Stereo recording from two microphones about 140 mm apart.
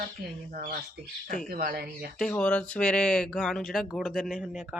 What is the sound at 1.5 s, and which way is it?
Speech, 90° right.